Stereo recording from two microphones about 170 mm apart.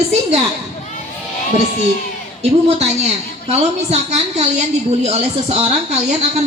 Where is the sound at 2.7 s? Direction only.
40° right (ahead or behind).